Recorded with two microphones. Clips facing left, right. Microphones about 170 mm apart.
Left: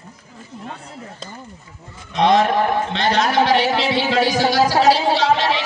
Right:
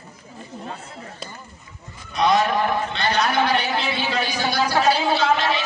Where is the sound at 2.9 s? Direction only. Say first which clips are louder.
Left 3 dB; 90° left.